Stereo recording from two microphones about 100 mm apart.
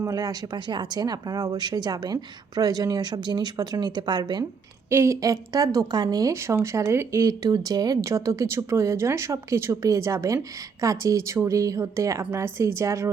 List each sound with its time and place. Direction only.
0.0 s speech: 35° right (ahead or behind)
4.9 s a woman's voice: 30° right (ahead or behind)